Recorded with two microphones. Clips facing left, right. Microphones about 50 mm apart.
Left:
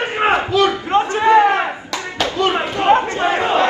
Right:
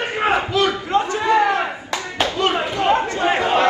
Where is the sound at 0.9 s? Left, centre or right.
Left.